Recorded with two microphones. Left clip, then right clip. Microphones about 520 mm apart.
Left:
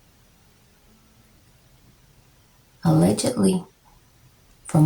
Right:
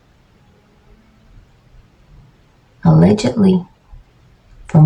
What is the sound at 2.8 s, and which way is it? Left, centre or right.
Speech, left.